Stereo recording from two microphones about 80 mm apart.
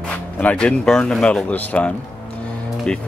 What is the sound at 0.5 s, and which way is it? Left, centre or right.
Speech, centre.